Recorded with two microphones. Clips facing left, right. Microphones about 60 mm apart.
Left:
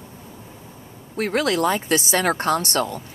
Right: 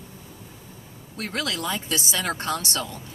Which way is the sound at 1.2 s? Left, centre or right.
Left.